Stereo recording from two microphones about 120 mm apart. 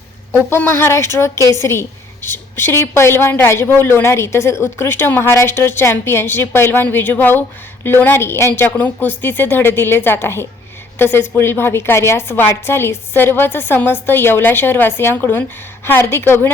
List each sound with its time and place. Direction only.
0.3 s a woman's voice: 20° left (ahead or behind)